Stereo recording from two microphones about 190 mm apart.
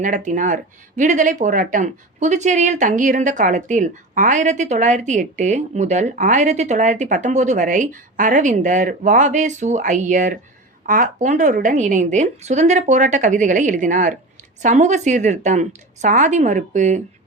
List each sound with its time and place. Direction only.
0.0 s speech: 40° right (ahead or behind)